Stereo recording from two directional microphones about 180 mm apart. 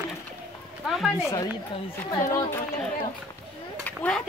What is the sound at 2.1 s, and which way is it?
Speech, 20° left (ahead or behind).